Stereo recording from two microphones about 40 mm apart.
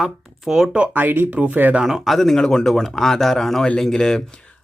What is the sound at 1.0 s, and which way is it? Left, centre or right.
Speech, right.